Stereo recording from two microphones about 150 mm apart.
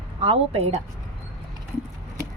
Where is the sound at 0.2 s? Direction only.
40° right (ahead or behind).